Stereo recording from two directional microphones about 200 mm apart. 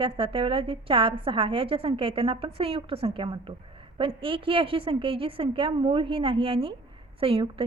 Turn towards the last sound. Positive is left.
turn(degrees=-25)  # may be behind; listen again after turning